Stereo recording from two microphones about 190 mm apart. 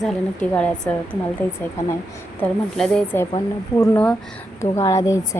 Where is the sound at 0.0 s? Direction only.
5° left (ahead or behind).